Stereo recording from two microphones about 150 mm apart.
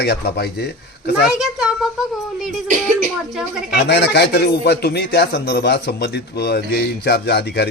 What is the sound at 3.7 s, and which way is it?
Speech, 90° left.